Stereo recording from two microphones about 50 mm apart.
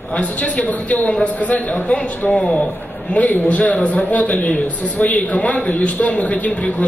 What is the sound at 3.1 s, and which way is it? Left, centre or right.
A man's voice, left.